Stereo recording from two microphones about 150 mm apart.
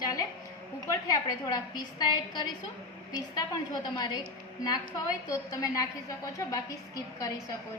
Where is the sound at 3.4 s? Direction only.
30° left (ahead or behind).